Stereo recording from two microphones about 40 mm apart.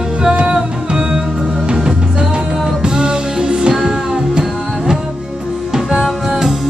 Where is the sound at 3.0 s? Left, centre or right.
Centre.